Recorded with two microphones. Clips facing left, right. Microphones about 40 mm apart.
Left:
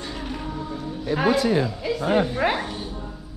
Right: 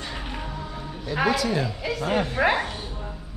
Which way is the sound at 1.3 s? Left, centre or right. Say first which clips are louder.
Left 4 dB; left.